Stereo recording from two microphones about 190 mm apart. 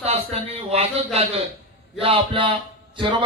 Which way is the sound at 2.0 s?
30° right (ahead or behind).